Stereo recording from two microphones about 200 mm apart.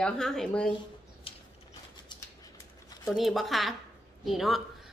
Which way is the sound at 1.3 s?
25° left (ahead or behind).